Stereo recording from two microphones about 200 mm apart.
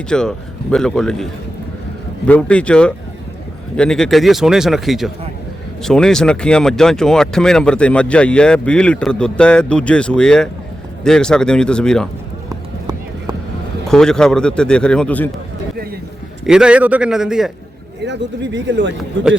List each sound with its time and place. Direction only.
0.1 s speech: 5° left (ahead or behind)
13.8 s speech: 5° left (ahead or behind)
16.5 s speech: 5° right (ahead or behind)
18.0 s speech: 60° right (ahead or behind)